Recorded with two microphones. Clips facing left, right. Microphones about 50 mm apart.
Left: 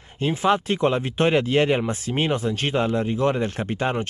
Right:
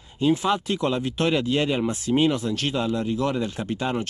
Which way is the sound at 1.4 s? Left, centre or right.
Left.